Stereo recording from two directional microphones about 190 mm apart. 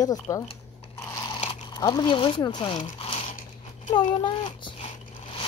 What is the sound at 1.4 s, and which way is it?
A child's voice, 25° left (ahead or behind).